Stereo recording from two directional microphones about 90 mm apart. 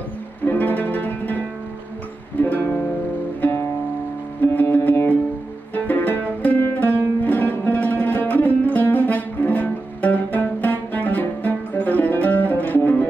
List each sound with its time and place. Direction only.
0.5 s music: 20° left (ahead or behind)
2.5 s music: 20° left (ahead or behind)